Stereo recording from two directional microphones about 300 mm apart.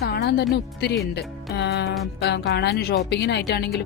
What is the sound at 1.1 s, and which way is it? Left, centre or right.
Music, left.